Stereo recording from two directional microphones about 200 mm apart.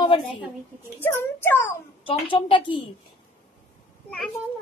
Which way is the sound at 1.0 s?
10° left (ahead or behind).